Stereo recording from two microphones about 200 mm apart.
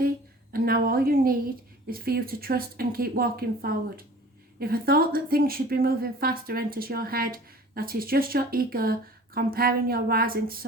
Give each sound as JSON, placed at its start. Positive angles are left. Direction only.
{"t": 0.5, "sound": "a woman's voice", "side_deg": -50}